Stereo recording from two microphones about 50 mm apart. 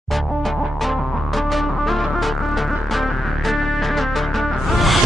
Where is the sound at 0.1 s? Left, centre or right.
Centre.